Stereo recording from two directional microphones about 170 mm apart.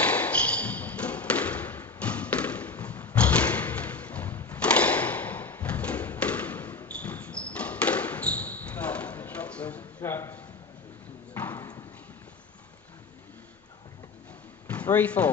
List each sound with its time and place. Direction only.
0.0 s a sound: 10° left (ahead or behind)
11.3 s clip-clop: 10° left (ahead or behind)
14.7 s speech: 10° left (ahead or behind)